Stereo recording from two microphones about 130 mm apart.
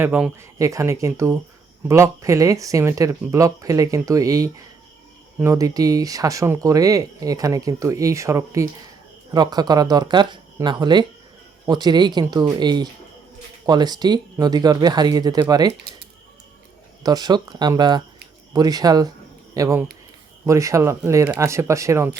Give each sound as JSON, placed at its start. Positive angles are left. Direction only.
{"t": 0.0, "sound": "speech", "side_deg": -15}
{"t": 17.0, "sound": "speech", "side_deg": -30}